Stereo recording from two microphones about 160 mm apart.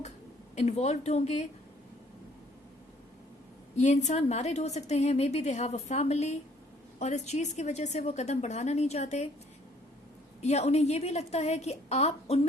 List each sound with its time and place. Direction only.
0.5 s a woman's voice: 45° left (ahead or behind)
3.8 s a woman's voice: 45° left (ahead or behind)
10.4 s a woman's voice: 45° left (ahead or behind)